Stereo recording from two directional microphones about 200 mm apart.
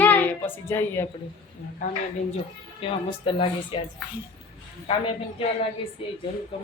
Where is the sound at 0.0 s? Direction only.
10° left (ahead or behind).